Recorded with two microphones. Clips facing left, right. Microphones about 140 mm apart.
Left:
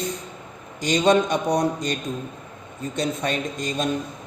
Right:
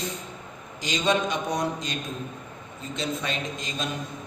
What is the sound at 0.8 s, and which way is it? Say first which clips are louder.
A man's voice: left 6 dB; 50° left (ahead or behind).